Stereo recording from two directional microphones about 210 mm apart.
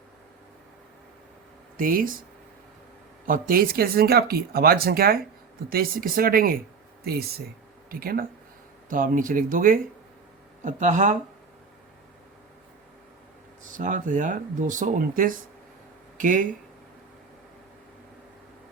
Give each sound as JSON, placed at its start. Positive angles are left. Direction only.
{"t": 1.7, "sound": "speech", "side_deg": -40}
{"t": 3.2, "sound": "speech", "side_deg": -40}
{"t": 13.7, "sound": "speech", "side_deg": -40}